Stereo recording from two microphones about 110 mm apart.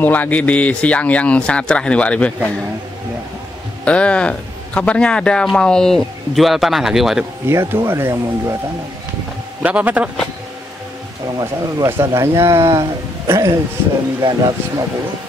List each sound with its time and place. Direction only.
0.0 s a man's voice: 15° left (ahead or behind)
3.8 s a man's voice: 10° left (ahead or behind)
7.4 s speech: 25° right (ahead or behind)
9.6 s a man's voice: 15° right (ahead or behind)
11.3 s speech: 30° right (ahead or behind)
14.2 s speech: 40° right (ahead or behind)